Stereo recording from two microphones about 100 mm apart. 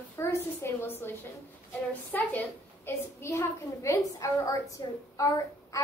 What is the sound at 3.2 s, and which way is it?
A child's voice, 30° left (ahead or behind).